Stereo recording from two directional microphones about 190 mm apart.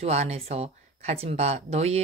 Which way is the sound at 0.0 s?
35° right (ahead or behind).